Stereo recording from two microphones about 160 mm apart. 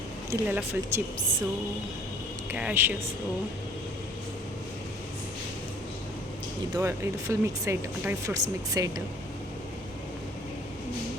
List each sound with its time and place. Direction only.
0.3 s speech: 15° right (ahead or behind)
2.5 s speech: 10° right (ahead or behind)
6.7 s speech: 20° right (ahead or behind)